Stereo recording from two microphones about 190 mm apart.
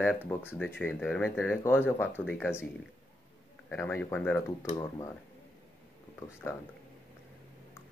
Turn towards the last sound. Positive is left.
turn(degrees=10)  # may be behind; listen again after turning